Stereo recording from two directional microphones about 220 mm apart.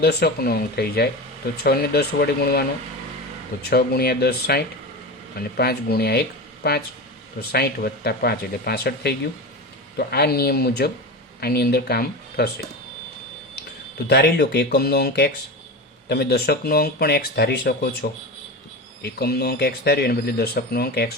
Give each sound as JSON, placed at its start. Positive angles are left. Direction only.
{"t": 0.0, "sound": "speech", "side_deg": 45}
{"t": 3.7, "sound": "speech", "side_deg": 45}
{"t": 14.1, "sound": "speech", "side_deg": 50}
{"t": 19.0, "sound": "speech", "side_deg": 45}